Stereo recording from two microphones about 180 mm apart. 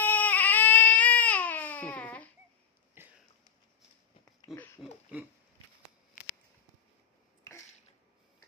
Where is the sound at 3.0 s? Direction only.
10° right (ahead or behind).